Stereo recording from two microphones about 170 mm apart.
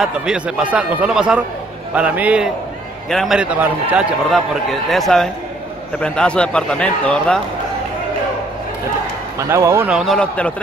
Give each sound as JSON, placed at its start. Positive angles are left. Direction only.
{"t": 0.0, "sound": "a man's voice", "side_deg": -5}
{"t": 9.5, "sound": "a man's voice", "side_deg": -15}